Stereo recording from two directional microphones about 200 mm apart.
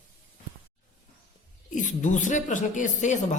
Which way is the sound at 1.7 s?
40° left (ahead or behind).